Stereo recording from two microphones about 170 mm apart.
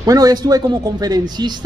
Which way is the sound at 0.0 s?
20° right (ahead or behind).